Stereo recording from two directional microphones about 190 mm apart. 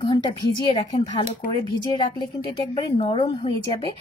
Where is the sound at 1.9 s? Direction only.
25° left (ahead or behind).